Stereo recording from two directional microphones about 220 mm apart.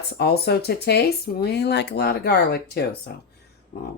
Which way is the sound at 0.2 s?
45° left (ahead or behind).